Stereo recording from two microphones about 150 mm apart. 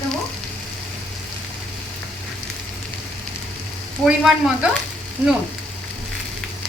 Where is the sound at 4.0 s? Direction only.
5° right (ahead or behind).